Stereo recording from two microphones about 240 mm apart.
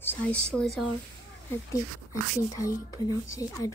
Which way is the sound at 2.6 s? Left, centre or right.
Centre.